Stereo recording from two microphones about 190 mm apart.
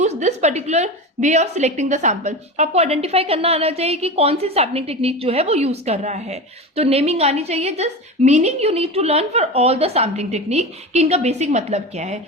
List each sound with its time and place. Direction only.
0.0 s a woman's voice: 35° right (ahead or behind)